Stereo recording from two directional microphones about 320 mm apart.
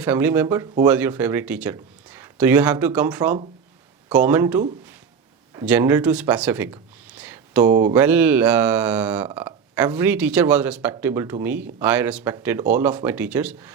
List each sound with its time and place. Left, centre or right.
0.0 s speech: centre